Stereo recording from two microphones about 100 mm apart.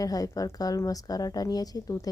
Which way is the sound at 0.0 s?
35° left (ahead or behind).